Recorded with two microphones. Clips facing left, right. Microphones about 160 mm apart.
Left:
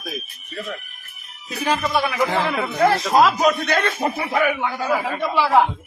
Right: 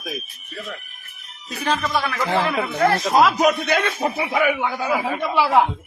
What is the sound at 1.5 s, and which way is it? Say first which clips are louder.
A man's voice: left 1 dB; 10° left (ahead or behind).